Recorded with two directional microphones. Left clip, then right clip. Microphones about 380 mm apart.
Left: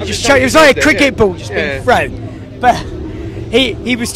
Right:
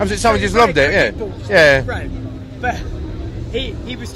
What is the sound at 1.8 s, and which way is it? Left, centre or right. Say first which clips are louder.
Speech: left 15 dB; left.